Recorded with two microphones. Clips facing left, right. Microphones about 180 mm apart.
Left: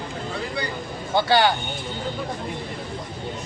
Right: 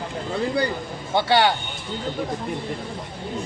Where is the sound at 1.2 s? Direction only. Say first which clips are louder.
Even; 25° right (ahead or behind).